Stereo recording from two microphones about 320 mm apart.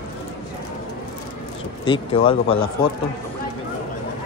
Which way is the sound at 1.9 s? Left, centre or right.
Centre.